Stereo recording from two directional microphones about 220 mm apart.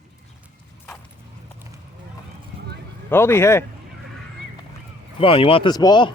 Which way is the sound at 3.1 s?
10° left (ahead or behind).